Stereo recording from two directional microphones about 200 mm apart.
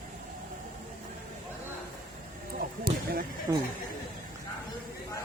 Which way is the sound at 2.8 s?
45° right (ahead or behind).